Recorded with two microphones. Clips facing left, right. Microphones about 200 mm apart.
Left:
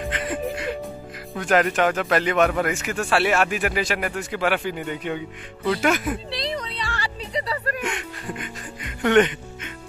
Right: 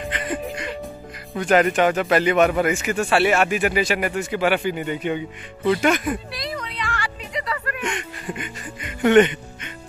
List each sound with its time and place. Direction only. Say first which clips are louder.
0.0 s music: even; centre (ahead or behind)
1.3 s speech: right 3 dB; centre (ahead or behind)
6.3 s music: left 2 dB; 30° left (ahead or behind)
7.8 s music: right 1 dB; centre (ahead or behind)